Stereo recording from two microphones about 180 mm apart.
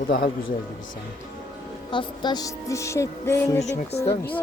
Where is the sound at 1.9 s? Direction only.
25° left (ahead or behind).